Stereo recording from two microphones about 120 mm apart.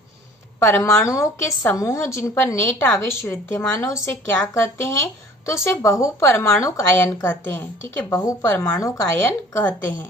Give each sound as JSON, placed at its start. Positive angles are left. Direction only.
{"t": 0.6, "sound": "speech", "side_deg": 25}